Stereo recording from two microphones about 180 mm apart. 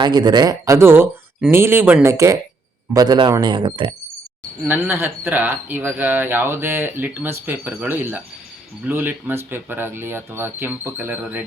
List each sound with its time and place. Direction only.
0.0 s speech: 25° right (ahead or behind)
4.7 s speech: 10° right (ahead or behind)